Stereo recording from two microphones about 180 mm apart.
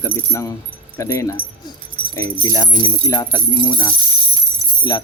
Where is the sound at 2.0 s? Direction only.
60° right (ahead or behind).